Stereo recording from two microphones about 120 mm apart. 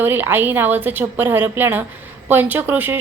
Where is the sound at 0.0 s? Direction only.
15° right (ahead or behind).